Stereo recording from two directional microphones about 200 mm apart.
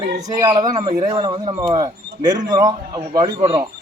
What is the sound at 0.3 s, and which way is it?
Speech, 20° right (ahead or behind).